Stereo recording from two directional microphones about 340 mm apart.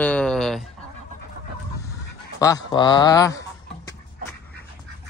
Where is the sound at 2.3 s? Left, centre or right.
Centre.